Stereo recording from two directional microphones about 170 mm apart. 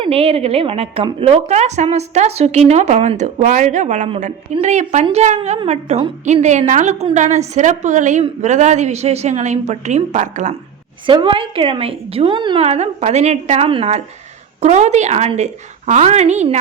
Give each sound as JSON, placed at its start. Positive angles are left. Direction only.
{"t": 0.0, "sound": "a woman's voice", "side_deg": -35}
{"t": 11.0, "sound": "a woman's voice", "side_deg": -30}